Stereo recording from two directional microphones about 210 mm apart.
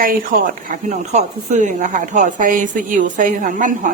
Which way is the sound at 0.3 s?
40° right (ahead or behind).